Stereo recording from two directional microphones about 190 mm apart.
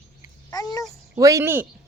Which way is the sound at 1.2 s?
15° right (ahead or behind).